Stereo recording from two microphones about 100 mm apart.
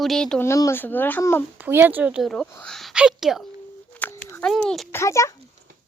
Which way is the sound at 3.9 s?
20° left (ahead or behind).